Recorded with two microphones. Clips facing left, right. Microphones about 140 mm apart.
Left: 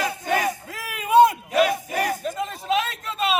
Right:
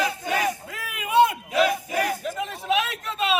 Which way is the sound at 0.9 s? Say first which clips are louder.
Left 4 dB; 40° left (ahead or behind).